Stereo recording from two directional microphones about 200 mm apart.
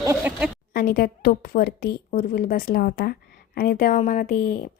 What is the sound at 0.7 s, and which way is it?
Speech, 45° left (ahead or behind).